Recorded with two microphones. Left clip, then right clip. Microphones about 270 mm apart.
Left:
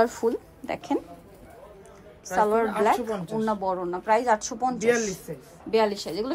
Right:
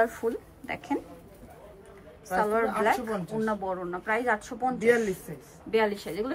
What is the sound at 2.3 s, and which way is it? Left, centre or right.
A woman's voice, centre.